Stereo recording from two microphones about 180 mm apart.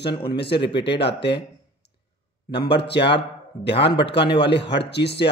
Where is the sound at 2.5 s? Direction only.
65° left (ahead or behind).